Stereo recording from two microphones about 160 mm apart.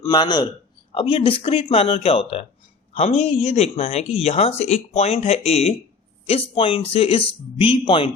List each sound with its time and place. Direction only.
0.0 s a man's voice: 25° left (ahead or behind)